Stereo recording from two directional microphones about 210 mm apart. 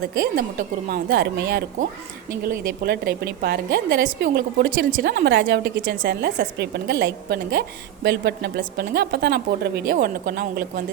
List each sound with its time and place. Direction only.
0.0 s a woman's voice: 45° right (ahead or behind)